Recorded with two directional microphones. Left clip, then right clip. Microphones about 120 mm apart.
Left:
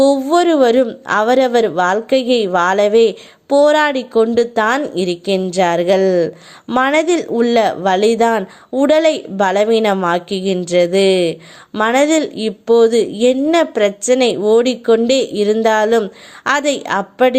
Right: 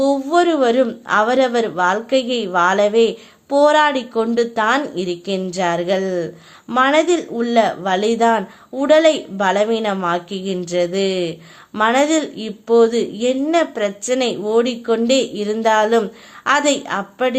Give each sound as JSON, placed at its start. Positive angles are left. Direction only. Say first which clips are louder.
{"t": 0.0, "sound": "a woman's voice", "louder": "left 3 dB", "side_deg": 40}